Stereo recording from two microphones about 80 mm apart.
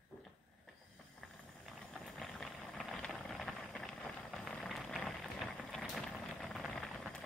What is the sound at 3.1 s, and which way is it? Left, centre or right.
Vehicle, centre.